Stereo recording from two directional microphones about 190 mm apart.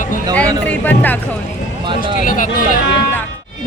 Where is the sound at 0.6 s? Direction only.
10° left (ahead or behind).